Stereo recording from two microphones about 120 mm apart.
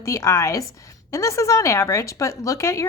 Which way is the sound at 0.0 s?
25° left (ahead or behind).